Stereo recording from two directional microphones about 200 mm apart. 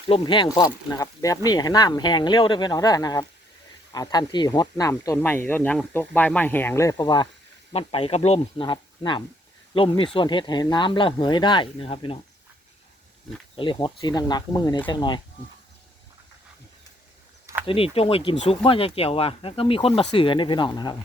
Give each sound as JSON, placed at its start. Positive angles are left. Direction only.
{"t": 0.1, "sound": "speech", "side_deg": 25}
{"t": 13.6, "sound": "speech", "side_deg": 25}
{"t": 17.7, "sound": "speech", "side_deg": 30}